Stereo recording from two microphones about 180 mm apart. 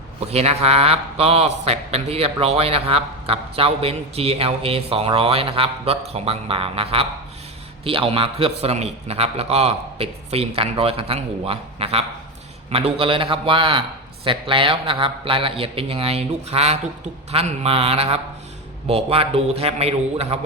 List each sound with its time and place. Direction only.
0.3 s a man's voice: 35° right (ahead or behind)